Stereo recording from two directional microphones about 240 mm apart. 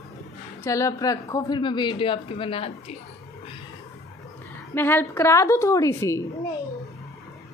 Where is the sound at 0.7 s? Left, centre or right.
Centre.